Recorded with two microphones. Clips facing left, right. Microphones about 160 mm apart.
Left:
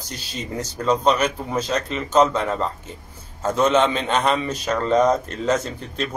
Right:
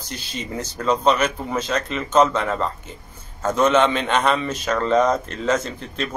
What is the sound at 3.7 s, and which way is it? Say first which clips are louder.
Speech: right 1 dB; 30° left (ahead or behind).